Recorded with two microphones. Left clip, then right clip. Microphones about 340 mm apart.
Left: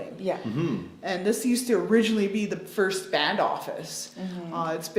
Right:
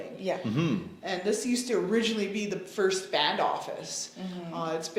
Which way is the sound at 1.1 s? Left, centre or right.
Left.